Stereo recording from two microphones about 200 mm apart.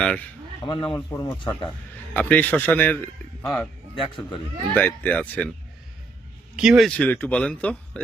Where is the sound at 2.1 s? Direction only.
10° left (ahead or behind).